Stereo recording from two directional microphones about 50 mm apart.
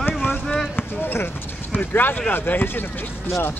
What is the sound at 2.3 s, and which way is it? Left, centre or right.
Speech, left.